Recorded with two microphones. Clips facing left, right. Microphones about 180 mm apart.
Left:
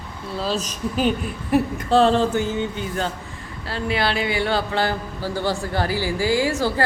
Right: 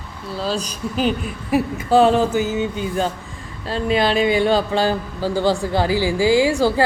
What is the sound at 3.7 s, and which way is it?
A man's voice, 20° right (ahead or behind).